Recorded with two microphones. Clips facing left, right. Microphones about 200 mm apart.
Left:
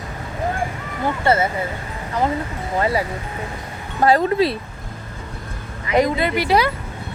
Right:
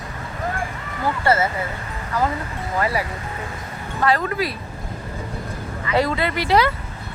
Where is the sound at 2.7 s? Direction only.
25° left (ahead or behind).